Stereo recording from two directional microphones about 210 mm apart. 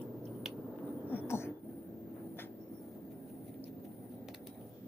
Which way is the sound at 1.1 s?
10° left (ahead or behind).